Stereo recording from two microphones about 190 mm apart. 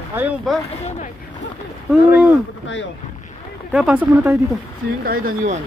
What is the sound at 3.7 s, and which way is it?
Speech, 5° right (ahead or behind).